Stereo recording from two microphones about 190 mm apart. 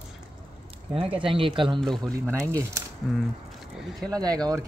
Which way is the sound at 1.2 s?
25° right (ahead or behind).